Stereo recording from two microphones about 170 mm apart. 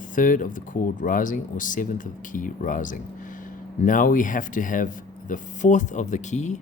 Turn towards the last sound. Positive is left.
turn(degrees=45)  # may be behind; listen again after turning